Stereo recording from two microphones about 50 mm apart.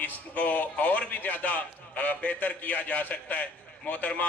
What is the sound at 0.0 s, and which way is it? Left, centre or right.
A man's voice, left.